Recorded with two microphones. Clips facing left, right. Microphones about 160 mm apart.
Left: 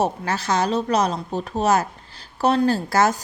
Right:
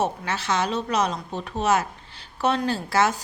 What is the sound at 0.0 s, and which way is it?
A woman's voice, 40° left (ahead or behind).